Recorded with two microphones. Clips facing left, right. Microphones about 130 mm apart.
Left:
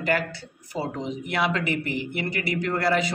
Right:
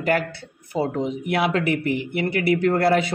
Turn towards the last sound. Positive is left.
turn(degrees=-60)  # may be behind; listen again after turning